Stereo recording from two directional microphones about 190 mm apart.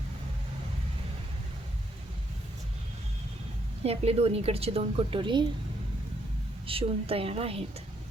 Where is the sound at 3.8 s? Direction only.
30° right (ahead or behind).